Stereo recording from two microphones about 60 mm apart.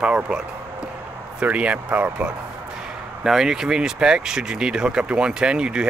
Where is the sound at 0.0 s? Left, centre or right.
Centre.